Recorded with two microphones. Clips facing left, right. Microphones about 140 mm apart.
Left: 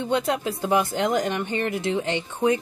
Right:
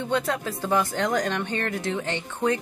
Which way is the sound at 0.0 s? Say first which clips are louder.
Left 2 dB; 20° left (ahead or behind).